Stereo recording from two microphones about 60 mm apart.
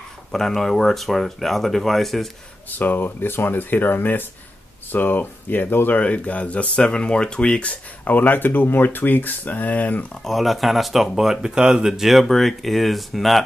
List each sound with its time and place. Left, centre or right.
0.3 s speech: centre
2.7 s speech: left
10.2 s speech: centre